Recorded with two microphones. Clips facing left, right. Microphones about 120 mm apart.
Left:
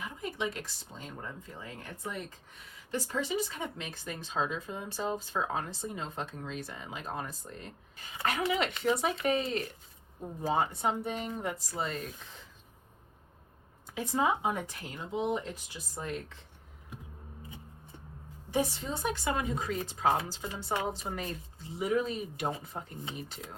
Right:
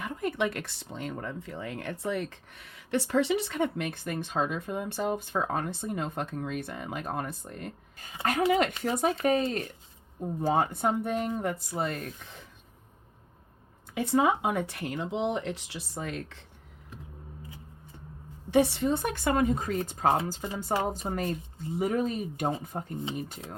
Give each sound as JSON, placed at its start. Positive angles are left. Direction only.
{"t": 0.0, "sound": "speech", "side_deg": -60}
{"t": 13.9, "sound": "speech", "side_deg": -65}
{"t": 18.5, "sound": "speech", "side_deg": -70}